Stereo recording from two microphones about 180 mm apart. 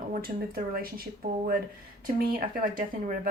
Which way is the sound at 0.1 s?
55° right (ahead or behind).